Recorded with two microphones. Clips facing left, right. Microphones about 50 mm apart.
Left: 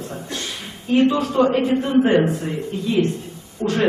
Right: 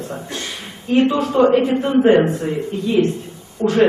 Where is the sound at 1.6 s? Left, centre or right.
Centre.